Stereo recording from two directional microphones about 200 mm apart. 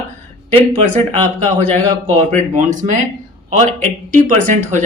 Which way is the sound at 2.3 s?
40° right (ahead or behind).